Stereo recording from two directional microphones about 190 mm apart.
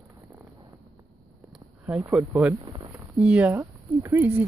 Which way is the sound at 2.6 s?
25° right (ahead or behind).